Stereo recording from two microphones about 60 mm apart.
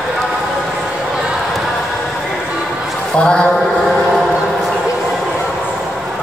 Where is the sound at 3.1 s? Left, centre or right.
Centre.